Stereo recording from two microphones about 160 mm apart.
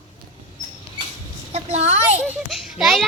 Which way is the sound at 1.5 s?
45° right (ahead or behind).